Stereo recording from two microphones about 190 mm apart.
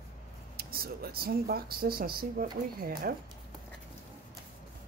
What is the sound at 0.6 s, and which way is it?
A woman's voice, 55° right (ahead or behind).